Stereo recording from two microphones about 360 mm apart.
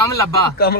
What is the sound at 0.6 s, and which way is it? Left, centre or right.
Speech, left.